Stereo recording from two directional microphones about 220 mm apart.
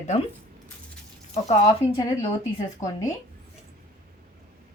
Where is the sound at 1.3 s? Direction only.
30° left (ahead or behind).